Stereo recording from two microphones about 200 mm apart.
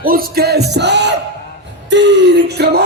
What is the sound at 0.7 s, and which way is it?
Speech, 60° right (ahead or behind).